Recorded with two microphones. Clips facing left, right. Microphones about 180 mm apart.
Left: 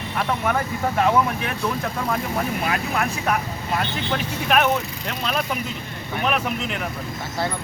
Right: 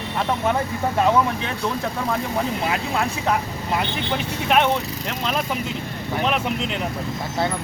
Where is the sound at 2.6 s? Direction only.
25° right (ahead or behind).